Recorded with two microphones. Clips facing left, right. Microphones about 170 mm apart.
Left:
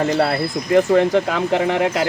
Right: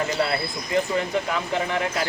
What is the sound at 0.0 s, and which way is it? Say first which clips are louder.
Speech: left 6 dB; 60° left (ahead or behind).